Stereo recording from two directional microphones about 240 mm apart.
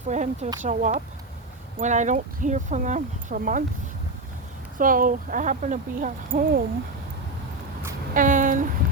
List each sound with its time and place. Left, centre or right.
0.1 s speech: right
4.8 s speech: right
8.1 s a sound: right